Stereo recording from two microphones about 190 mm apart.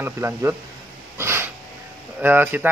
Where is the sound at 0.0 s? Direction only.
10° right (ahead or behind).